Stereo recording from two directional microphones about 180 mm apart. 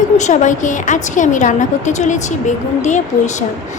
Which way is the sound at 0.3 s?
45° left (ahead or behind).